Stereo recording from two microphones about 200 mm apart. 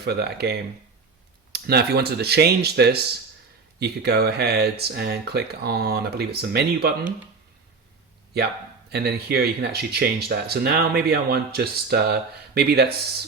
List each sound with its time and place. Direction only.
0.0 s speech: 55° right (ahead or behind)
8.9 s speech: 55° right (ahead or behind)